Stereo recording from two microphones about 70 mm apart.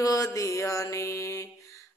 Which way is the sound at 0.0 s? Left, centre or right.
Left.